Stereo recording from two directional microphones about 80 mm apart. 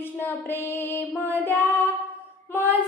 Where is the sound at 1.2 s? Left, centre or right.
Left.